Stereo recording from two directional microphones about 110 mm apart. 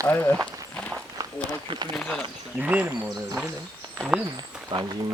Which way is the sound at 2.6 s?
15° right (ahead or behind).